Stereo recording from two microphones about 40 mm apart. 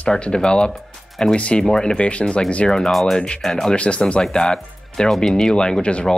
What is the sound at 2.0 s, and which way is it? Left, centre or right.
Speech, left.